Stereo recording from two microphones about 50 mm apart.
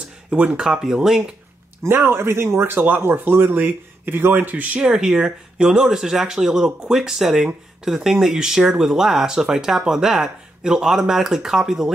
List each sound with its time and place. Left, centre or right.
0.3 s speech: centre
1.8 s a man's voice: right
2.7 s speech: right
4.7 s speech: centre